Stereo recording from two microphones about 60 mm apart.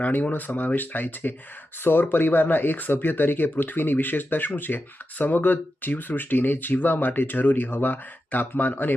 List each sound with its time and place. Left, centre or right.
0.0 s speech: left